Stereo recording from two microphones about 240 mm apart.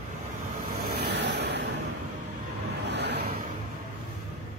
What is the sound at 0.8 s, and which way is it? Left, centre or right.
Vehicle, right.